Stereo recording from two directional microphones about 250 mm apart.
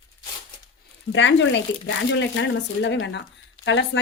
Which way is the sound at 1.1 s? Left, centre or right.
Left.